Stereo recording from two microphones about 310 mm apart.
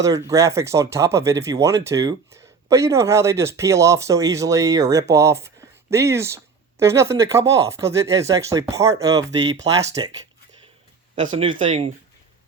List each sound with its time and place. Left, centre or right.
0.0 s speech: centre